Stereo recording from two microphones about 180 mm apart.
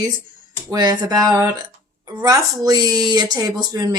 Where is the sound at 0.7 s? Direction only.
20° right (ahead or behind).